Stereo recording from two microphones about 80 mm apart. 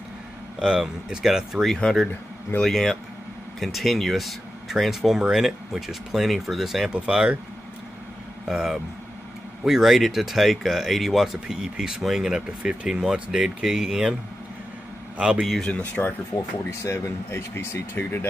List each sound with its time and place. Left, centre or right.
0.6 s speech: centre
1.8 s speech: centre
8.5 s speech: centre
15.1 s speech: centre
15.7 s speech: centre
16.8 s speech: left